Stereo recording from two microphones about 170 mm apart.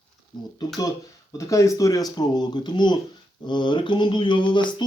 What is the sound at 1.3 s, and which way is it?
Speech, 20° left (ahead or behind).